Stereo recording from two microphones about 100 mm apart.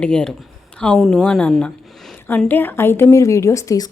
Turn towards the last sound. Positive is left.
turn(degrees=35)  # may be behind; listen again after turning